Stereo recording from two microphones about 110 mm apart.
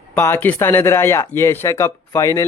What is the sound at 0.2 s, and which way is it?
Speech, 20° left (ahead or behind).